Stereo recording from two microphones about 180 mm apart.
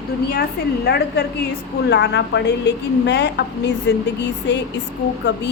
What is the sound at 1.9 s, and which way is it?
A woman's voice, 75° left (ahead or behind).